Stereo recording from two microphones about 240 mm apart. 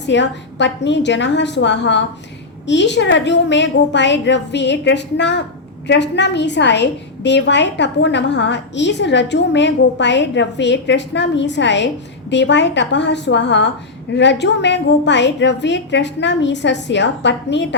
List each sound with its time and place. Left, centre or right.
0.0 s a woman's voice: left